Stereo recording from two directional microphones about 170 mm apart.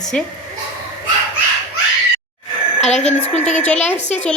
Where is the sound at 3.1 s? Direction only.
40° left (ahead or behind).